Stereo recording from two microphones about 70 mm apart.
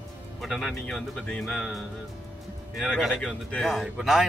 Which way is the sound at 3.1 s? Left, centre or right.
Centre.